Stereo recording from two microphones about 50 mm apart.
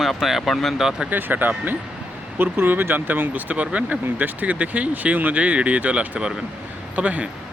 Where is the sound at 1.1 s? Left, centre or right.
Right.